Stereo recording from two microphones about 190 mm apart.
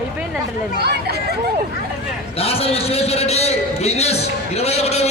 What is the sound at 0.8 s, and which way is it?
Speech, 60° right (ahead or behind).